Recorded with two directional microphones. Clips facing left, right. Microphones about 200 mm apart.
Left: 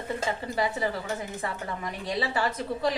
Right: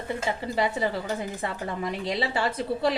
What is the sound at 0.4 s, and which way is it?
A woman's voice, 25° right (ahead or behind).